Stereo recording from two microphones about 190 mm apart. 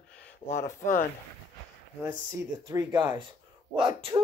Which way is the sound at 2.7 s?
15° right (ahead or behind).